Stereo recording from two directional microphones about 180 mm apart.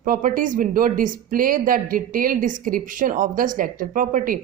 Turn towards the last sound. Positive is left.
turn(degrees=-50)  # may be behind; listen again after turning